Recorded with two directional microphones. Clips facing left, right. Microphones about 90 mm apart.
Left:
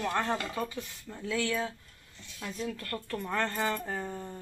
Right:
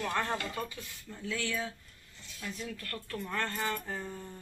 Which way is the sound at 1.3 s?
45° left (ahead or behind).